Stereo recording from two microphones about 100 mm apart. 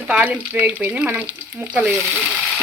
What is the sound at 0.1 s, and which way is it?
Frying, 10° right (ahead or behind).